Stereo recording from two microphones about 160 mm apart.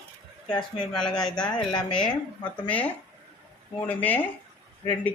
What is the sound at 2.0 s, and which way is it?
A woman's voice, 5° left (ahead or behind).